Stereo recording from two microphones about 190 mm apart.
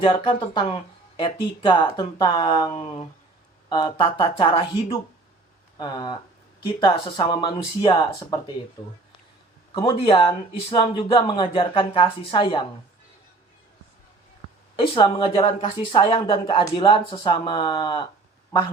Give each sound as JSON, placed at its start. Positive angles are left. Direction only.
{"t": 0.0, "sound": "a woman's voice", "side_deg": 25}
{"t": 2.7, "sound": "a sound", "side_deg": 30}
{"t": 3.7, "sound": "a woman's voice", "side_deg": 25}
{"t": 9.8, "sound": "a woman's voice", "side_deg": 25}
{"t": 14.8, "sound": "a woman's voice", "side_deg": 25}